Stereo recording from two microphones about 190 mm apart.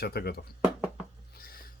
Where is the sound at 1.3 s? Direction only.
50° left (ahead or behind).